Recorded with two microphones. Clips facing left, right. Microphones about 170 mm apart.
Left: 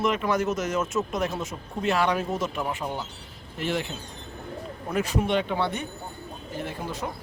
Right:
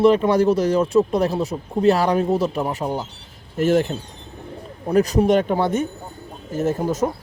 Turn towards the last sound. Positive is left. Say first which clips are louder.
# right 12 dB
turn(degrees=-40)  # may be behind; listen again after turning